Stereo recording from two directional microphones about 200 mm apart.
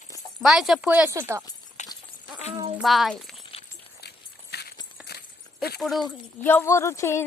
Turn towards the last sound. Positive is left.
turn(degrees=15)  # may be behind; listen again after turning